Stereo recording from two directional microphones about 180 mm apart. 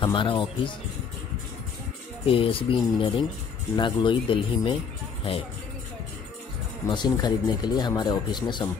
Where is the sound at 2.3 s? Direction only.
30° left (ahead or behind).